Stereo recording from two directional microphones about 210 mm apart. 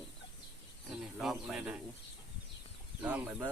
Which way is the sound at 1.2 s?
Centre (ahead or behind).